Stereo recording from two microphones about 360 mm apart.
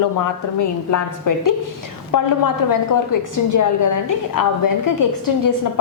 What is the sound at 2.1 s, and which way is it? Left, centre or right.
A woman's voice, left.